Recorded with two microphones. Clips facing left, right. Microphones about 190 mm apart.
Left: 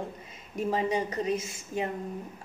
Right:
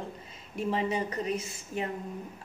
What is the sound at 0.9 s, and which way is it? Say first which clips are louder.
Speech: left 2 dB; 15° left (ahead or behind).